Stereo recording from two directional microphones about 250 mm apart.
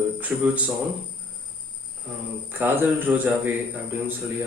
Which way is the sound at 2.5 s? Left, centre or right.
Centre.